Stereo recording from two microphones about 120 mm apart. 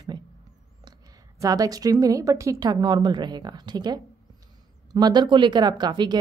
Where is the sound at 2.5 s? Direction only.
35° right (ahead or behind).